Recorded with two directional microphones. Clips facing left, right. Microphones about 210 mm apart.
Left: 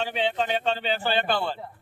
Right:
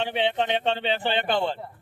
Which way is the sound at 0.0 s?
25° right (ahead or behind).